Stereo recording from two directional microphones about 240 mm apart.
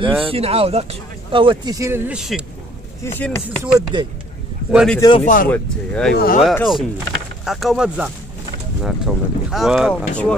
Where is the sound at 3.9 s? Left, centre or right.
Centre.